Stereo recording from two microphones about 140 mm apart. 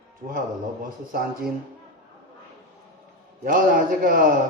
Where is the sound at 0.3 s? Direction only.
80° right.